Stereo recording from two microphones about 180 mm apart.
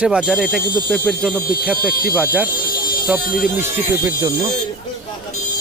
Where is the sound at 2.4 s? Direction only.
50° left (ahead or behind).